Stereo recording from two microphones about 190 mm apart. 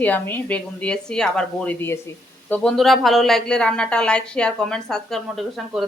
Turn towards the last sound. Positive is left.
turn(degrees=0)  # may be behind; listen again after turning